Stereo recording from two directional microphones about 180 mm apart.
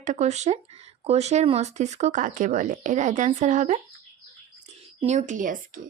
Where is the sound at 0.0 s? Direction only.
40° right (ahead or behind).